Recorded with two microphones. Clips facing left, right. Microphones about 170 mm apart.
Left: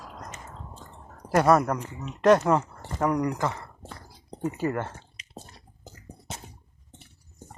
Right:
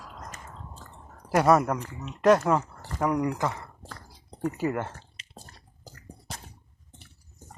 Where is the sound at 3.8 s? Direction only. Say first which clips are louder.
Left 2 dB; 25° left (ahead or behind).